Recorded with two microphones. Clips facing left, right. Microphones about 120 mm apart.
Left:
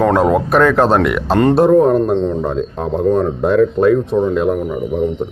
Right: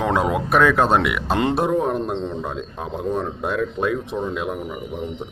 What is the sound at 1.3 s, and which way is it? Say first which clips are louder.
Speech: left 8 dB; 50° left (ahead or behind).